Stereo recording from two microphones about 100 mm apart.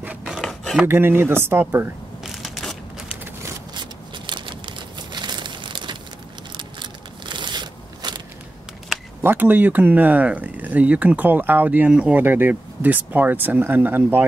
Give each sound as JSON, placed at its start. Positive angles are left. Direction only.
{"t": 0.0, "sound": "filing", "side_deg": -15}
{"t": 0.3, "sound": "filing", "side_deg": 5}
{"t": 0.8, "sound": "speech", "side_deg": -25}
{"t": 2.2, "sound": "a sound", "side_deg": 0}
{"t": 5.1, "sound": "crumpling", "side_deg": -50}
{"t": 6.5, "sound": "a sound", "side_deg": -50}
{"t": 9.2, "sound": "speech", "side_deg": -20}